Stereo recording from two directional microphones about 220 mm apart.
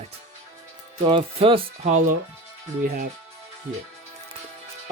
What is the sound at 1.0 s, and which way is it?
Speech, 25° right (ahead or behind).